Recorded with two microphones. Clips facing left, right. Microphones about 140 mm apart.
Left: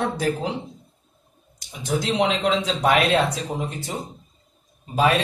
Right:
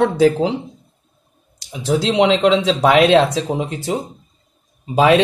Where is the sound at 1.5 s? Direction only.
90° right.